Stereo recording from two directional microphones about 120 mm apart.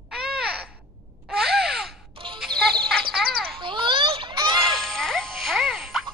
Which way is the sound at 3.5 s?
45° right (ahead or behind).